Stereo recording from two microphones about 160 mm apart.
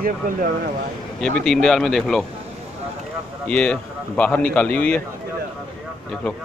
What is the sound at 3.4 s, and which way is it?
A man's voice, 5° left (ahead or behind).